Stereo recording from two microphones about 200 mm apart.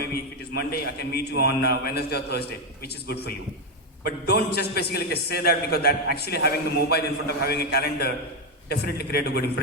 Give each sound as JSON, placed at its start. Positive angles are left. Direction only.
{"t": 0.0, "sound": "a man's voice", "side_deg": 50}